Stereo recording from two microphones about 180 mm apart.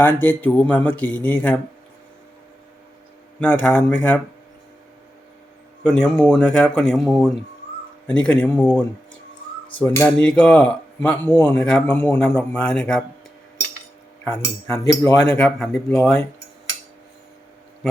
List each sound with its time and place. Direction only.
0.0 s speech: 10° left (ahead or behind)
3.4 s speech: 5° left (ahead or behind)
5.8 s speech: 5° left (ahead or behind)
14.7 s speech: 20° left (ahead or behind)
15.4 s speech: 5° left (ahead or behind)